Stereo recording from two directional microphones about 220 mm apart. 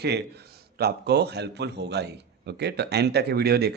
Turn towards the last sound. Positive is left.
turn(degrees=-45)  # may be behind; listen again after turning